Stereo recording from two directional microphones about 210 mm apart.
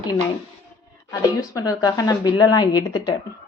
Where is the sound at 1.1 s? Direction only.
15° left (ahead or behind).